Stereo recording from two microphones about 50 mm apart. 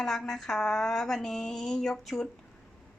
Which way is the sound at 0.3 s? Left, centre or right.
Centre.